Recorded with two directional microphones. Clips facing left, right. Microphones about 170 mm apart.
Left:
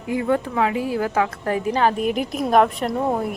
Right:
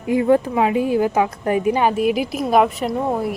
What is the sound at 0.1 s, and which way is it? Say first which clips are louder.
Speech: right 5 dB; 25° right (ahead or behind).